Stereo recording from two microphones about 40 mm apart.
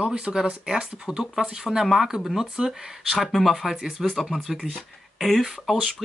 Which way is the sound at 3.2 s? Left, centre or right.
Centre.